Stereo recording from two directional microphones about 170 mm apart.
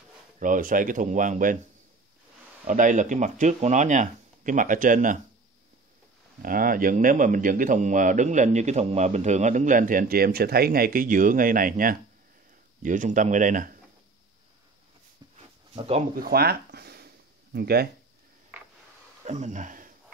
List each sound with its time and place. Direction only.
0.4 s speech: 55° right (ahead or behind)
2.6 s speech: 50° right (ahead or behind)
6.4 s speech: 55° right (ahead or behind)
15.7 s speech: 35° right (ahead or behind)
16.2 s a sound: 65° right (ahead or behind)
19.2 s speech: 45° right (ahead or behind)